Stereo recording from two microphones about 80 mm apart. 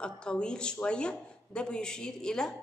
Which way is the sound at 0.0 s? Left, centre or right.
Centre.